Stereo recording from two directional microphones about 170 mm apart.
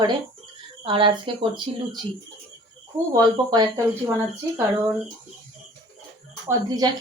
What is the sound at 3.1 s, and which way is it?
Speech, 20° right (ahead or behind).